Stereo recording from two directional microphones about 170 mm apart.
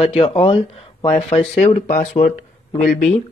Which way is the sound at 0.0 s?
35° left (ahead or behind).